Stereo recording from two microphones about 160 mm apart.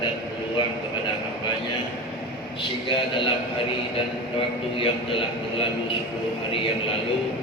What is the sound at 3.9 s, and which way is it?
A man's voice, 35° left (ahead or behind).